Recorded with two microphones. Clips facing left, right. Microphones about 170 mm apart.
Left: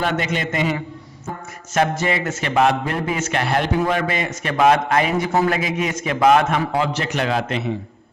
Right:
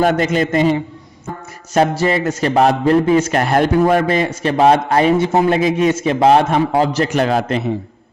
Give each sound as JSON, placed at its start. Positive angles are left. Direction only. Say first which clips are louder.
{"t": 0.0, "sound": "a man's voice", "louder": "right 8 dB", "side_deg": -45}
{"t": 2.0, "sound": "a man's voice", "louder": "right 6 dB", "side_deg": -35}